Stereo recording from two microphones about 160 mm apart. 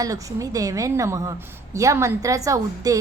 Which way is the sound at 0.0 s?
20° right (ahead or behind).